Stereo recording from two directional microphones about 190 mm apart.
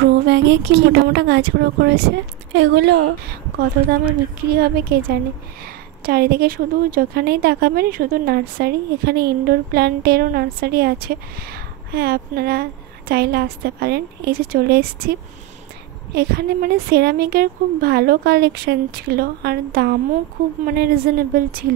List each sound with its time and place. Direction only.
0.0 s a woman's voice: 60° right (ahead or behind)
4.6 s a woman's voice: 55° right (ahead or behind)
16.2 s a woman's voice: 55° right (ahead or behind)